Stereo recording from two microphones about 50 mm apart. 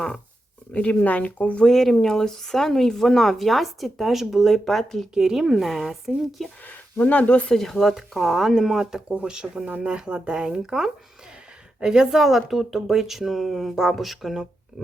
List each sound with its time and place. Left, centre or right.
0.7 s speech: left
1.6 s speech: centre
4.5 s speech: centre
5.1 s speech: centre
7.0 s speech: left
7.5 s speech: centre
12.2 s speech: centre